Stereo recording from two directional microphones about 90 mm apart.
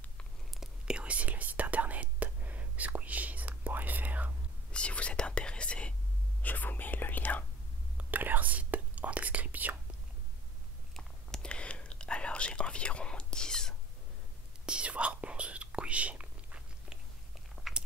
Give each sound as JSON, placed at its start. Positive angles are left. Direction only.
{"t": 0.6, "sound": "whispering", "side_deg": -10}
{"t": 4.7, "sound": "whispering", "side_deg": 15}
{"t": 8.0, "sound": "whispering", "side_deg": -20}
{"t": 11.0, "sound": "whispering", "side_deg": 10}
{"t": 14.7, "sound": "whispering", "side_deg": -15}
{"t": 17.7, "sound": "biting", "side_deg": 0}